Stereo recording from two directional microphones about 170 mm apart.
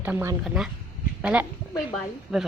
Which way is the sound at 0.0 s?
10° right (ahead or behind).